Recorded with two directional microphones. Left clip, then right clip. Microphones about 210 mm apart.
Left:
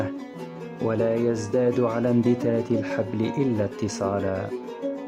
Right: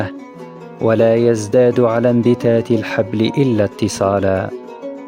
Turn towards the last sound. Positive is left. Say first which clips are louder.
# right 11 dB
turn(degrees=-35)  # may be behind; listen again after turning